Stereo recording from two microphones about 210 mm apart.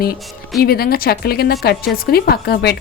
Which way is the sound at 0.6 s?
45° left (ahead or behind).